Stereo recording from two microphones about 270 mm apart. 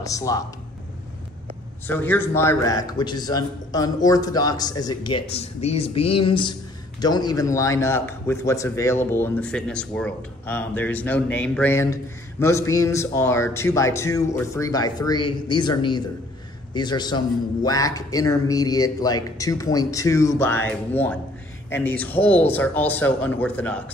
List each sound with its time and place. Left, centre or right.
0.0 s a man's voice: centre
1.9 s a man's voice: centre